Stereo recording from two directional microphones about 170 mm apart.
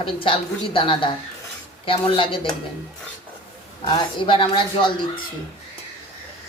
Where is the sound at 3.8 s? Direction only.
30° left (ahead or behind).